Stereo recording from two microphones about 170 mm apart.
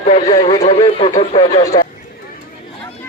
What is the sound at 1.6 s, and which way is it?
Speech, 20° left (ahead or behind).